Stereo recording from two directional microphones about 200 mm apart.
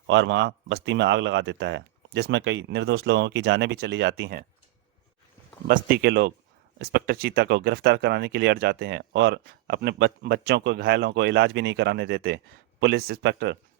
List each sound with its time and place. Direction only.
0.1 s speech: 65° right (ahead or behind)
5.6 s speech: 45° right (ahead or behind)